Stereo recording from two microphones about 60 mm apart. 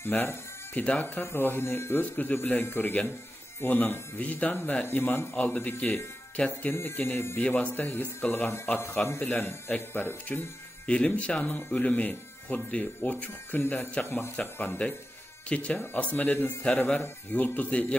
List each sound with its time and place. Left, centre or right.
0.0 s speech: left
2.1 s speech: left
5.4 s speech: left
6.7 s speech: left
7.4 s speech: left
9.0 s speech: left
10.9 s speech: left
14.3 s speech: left